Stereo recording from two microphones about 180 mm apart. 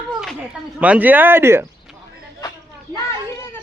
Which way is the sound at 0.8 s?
10° right (ahead or behind).